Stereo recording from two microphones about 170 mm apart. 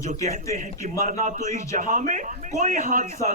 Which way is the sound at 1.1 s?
45° right (ahead or behind).